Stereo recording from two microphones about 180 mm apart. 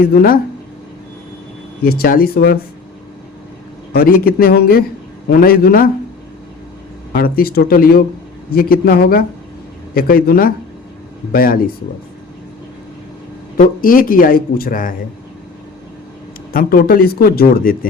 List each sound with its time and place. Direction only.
0.0 s speech: 55° left (ahead or behind)
1.8 s speech: 55° left (ahead or behind)
3.9 s speech: 55° left (ahead or behind)
7.1 s speech: 55° left (ahead or behind)
13.6 s speech: 50° left (ahead or behind)
16.5 s speech: 55° left (ahead or behind)